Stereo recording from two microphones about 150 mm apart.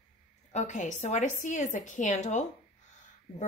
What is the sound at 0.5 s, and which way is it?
Speech, 55° left (ahead or behind).